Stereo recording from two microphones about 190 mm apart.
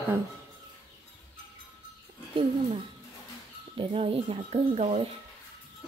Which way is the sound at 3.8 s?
30° right (ahead or behind).